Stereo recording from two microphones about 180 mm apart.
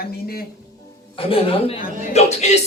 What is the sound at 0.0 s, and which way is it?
Speech, 55° left (ahead or behind).